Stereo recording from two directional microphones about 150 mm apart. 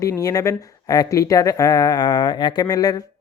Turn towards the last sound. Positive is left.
turn(degrees=25)  # may be behind; listen again after turning